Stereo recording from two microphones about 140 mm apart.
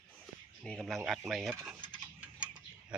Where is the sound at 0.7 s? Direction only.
5° right (ahead or behind).